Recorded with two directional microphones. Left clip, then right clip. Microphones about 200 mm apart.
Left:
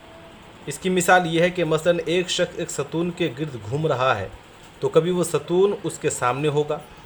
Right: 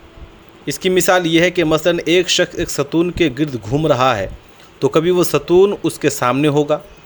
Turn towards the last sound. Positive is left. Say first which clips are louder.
# right 8 dB
turn(degrees=-40)  # may be behind; listen again after turning